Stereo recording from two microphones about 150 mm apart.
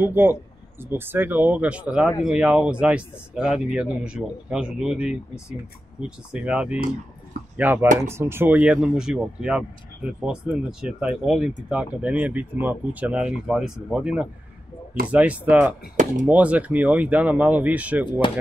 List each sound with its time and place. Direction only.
0.0 s speech: 15° right (ahead or behind)
18.2 s speech: 35° left (ahead or behind)